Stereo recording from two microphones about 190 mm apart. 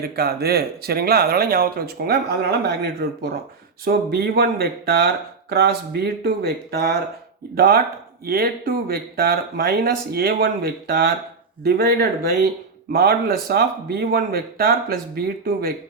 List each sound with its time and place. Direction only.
0.0 s speech: 55° right (ahead or behind)